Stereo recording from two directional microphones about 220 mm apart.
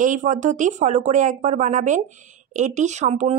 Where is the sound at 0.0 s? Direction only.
35° right (ahead or behind).